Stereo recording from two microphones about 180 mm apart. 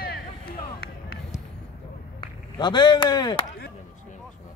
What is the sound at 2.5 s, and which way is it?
Speech, 25° left (ahead or behind).